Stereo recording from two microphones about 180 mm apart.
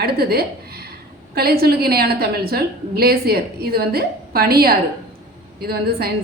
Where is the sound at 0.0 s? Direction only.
60° right (ahead or behind).